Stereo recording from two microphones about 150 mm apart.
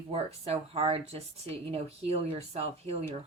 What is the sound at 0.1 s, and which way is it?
Speech, 40° right (ahead or behind).